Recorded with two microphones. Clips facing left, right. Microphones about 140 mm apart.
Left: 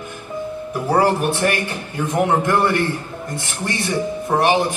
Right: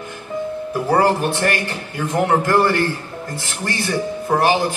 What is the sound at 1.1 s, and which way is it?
Speech, 20° left (ahead or behind).